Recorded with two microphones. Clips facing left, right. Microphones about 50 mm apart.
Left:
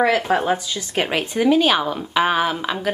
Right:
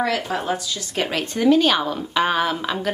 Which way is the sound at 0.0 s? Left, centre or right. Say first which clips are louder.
Left 5 dB; left.